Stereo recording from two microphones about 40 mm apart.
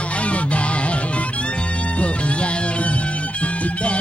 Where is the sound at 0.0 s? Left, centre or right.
Left.